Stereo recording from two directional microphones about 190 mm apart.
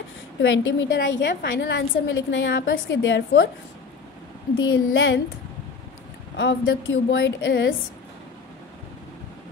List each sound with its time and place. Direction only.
0.4 s a woman's voice: 80° left
4.6 s a woman's voice: 85° left
6.3 s a woman's voice: 75° left (ahead or behind)